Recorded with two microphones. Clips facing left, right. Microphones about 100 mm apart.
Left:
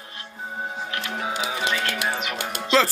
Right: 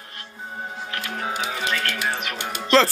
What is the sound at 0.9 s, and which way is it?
Music, 15° left (ahead or behind).